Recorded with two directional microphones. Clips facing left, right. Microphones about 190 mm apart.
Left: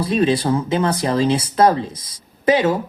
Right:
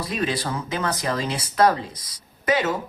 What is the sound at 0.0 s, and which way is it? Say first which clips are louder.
Speech: left 9 dB; 30° left (ahead or behind).